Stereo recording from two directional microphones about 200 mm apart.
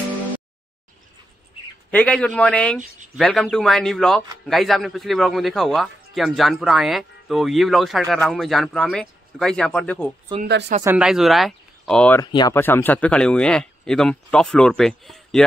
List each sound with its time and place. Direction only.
1.9 s a man's voice: 5° left (ahead or behind)
10.4 s speech: 55° right (ahead or behind)
10.8 s a man's voice: 5° right (ahead or behind)
12.2 s a man's voice: 20° left (ahead or behind); by 15.4 s centre (ahead or behind)